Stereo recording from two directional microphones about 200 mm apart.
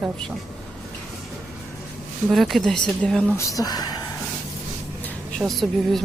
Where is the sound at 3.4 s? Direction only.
15° left (ahead or behind).